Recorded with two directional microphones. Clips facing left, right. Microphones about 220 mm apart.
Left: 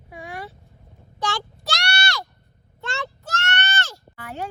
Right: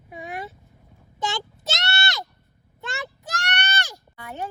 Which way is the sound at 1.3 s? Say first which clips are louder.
Left 2 dB; 20° right (ahead or behind).